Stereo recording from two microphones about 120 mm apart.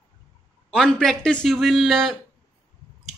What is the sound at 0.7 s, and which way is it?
Speech, 5° left (ahead or behind).